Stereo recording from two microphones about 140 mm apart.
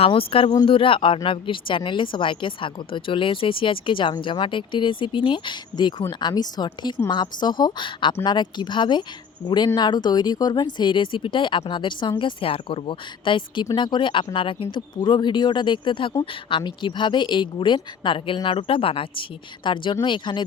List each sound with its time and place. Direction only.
0.0 s speech: 40° left (ahead or behind)